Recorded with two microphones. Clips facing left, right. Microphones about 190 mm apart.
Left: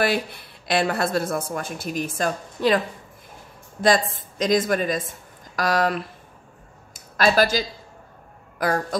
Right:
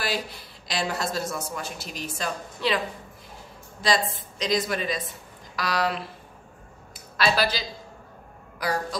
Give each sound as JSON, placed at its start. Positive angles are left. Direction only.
{"t": 0.0, "sound": "speech", "side_deg": 60}
{"t": 3.8, "sound": "speech", "side_deg": 50}
{"t": 6.9, "sound": "a sound", "side_deg": 45}
{"t": 8.6, "sound": "speech", "side_deg": 50}